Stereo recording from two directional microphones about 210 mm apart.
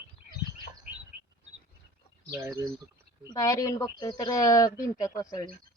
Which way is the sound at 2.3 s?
15° right (ahead or behind).